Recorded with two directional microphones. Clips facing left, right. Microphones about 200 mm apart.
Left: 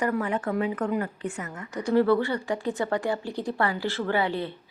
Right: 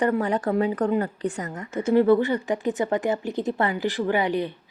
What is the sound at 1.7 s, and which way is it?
A woman's voice, 20° right (ahead or behind).